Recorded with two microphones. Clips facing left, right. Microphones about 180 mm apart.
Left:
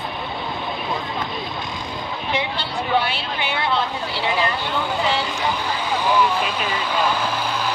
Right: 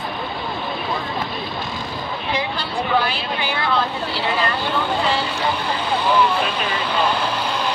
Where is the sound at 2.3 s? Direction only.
25° left (ahead or behind).